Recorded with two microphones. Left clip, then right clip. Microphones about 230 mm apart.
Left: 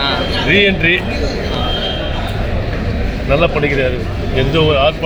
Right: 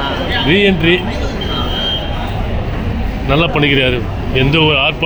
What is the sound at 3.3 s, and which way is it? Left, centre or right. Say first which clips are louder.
Speech: right 1 dB; right.